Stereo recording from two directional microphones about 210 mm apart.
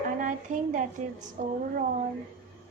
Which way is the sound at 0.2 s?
40° right (ahead or behind).